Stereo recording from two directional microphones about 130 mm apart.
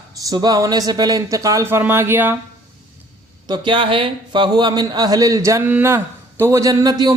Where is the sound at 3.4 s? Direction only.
35° right (ahead or behind).